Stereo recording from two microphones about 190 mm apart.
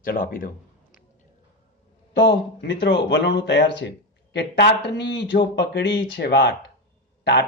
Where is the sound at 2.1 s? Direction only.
65° left (ahead or behind).